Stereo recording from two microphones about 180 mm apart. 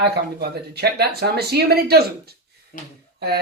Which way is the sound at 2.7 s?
45° left (ahead or behind).